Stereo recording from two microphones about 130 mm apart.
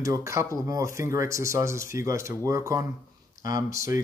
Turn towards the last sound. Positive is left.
turn(degrees=-25)  # may be behind; listen again after turning